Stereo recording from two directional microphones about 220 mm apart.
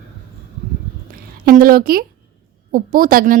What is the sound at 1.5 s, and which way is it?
A woman's voice, 40° right (ahead or behind).